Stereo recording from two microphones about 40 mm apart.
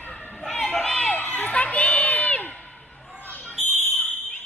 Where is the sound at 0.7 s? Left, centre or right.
Centre.